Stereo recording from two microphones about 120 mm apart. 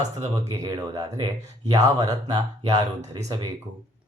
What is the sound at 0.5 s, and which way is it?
Speech, 30° right (ahead or behind).